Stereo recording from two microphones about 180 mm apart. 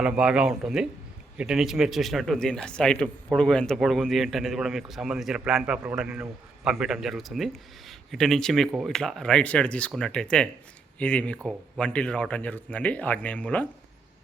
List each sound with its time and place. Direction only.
0.0 s a man's voice: 5° right (ahead or behind)